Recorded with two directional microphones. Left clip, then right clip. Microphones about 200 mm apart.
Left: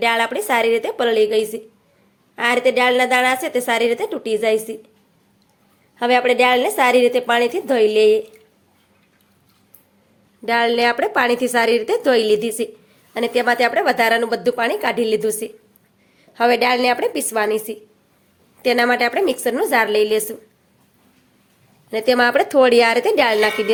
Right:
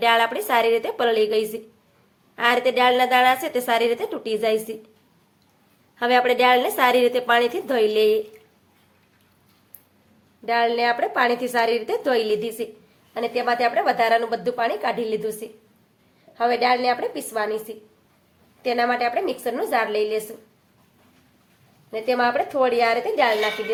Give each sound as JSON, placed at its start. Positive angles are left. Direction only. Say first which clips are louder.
{"t": 0.0, "sound": "a woman's voice", "louder": "left 1 dB", "side_deg": 15}
{"t": 6.0, "sound": "a woman's voice", "louder": "left 3 dB", "side_deg": 15}
{"t": 10.4, "sound": "a woman's voice", "louder": "left 4 dB", "side_deg": 30}
{"t": 21.8, "sound": "a woman's voice", "louder": "left 5 dB", "side_deg": 45}